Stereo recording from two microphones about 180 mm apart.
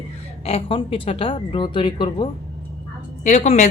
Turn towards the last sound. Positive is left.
turn(degrees=40)  # may be behind; listen again after turning